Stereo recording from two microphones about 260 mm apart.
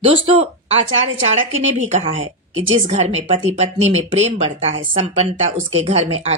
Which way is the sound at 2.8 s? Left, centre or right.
Right.